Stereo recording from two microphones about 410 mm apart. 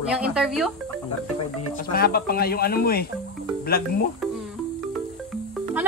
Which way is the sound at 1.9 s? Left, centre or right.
Left.